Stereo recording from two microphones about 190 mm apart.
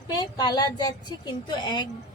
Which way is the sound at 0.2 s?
20° left (ahead or behind).